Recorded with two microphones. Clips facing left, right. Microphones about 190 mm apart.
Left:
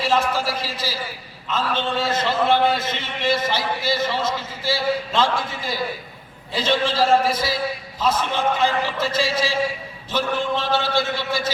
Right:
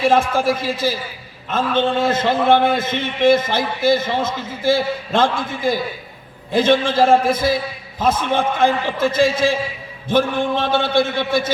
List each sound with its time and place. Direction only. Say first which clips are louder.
0.0 s a man's voice: right 5 dB; 50° right (ahead or behind)